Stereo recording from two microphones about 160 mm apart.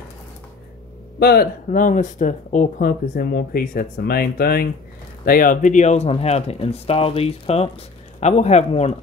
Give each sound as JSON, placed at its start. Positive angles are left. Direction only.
{"t": 1.2, "sound": "speech", "side_deg": 70}
{"t": 5.2, "sound": "a man's voice", "side_deg": 65}